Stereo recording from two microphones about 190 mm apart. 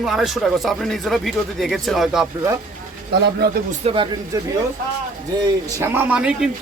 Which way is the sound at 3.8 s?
30° right (ahead or behind).